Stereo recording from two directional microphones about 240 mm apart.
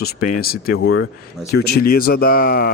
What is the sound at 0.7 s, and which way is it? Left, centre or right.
Speech, left.